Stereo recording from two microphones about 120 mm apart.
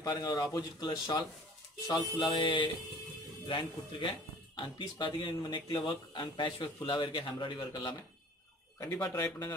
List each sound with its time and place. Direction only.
0.0 s speech: 30° left (ahead or behind)
1.9 s music: 35° left (ahead or behind)
3.4 s speech: 40° left (ahead or behind)
8.9 s speech: 15° left (ahead or behind)